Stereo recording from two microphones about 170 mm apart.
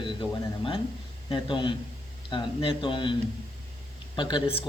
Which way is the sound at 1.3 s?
30° left (ahead or behind).